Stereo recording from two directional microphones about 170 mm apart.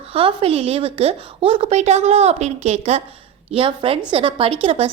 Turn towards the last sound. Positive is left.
turn(degrees=-35)  # may be behind; listen again after turning